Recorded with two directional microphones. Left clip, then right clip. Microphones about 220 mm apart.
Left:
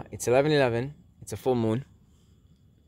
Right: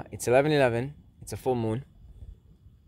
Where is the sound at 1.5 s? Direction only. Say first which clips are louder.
Left 2 dB; 25° left (ahead or behind).